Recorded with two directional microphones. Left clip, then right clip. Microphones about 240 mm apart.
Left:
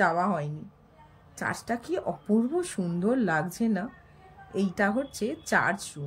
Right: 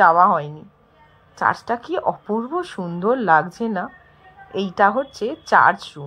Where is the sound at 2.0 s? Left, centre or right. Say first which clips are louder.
Right 6 dB; right.